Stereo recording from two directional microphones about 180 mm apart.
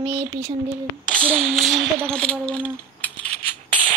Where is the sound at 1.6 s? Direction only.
Centre (ahead or behind).